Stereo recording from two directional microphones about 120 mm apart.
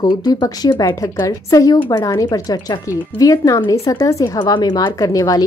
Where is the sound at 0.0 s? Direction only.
35° left (ahead or behind).